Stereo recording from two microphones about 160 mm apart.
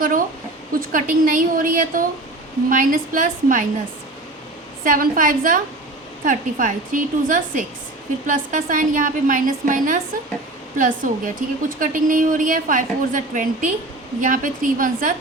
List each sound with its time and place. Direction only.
0.8 s a woman's voice: 60° right (ahead or behind)
4.8 s a woman's voice: 60° right (ahead or behind)